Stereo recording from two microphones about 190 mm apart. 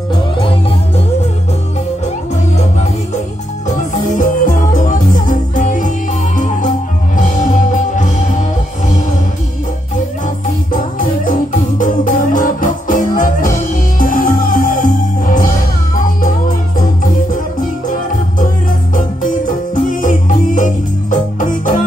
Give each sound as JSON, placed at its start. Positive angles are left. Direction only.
{"t": 0.1, "sound": "music", "side_deg": 25}
{"t": 4.2, "sound": "music", "side_deg": 45}
{"t": 10.2, "sound": "music", "side_deg": 45}
{"t": 18.9, "sound": "music", "side_deg": 45}